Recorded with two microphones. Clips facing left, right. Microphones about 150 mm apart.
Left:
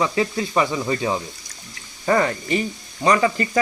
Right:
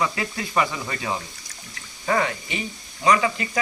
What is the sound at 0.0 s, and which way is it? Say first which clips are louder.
Speech: left 5 dB; 25° left (ahead or behind).